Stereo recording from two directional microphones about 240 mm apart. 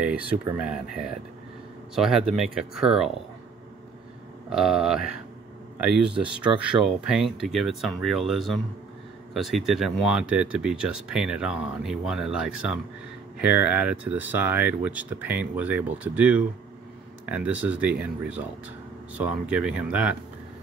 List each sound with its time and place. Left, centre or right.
0.0 s speech: centre
4.5 s speech: centre